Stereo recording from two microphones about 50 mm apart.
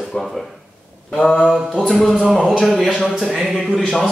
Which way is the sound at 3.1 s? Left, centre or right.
Centre.